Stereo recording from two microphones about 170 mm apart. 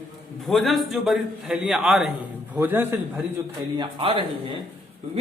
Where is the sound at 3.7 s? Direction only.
30° right (ahead or behind).